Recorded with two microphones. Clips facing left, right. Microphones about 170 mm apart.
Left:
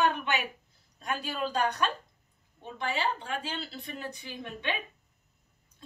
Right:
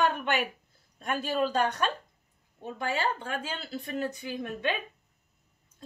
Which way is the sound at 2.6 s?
45° right (ahead or behind).